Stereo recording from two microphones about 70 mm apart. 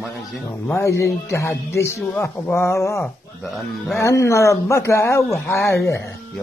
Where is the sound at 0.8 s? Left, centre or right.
Left.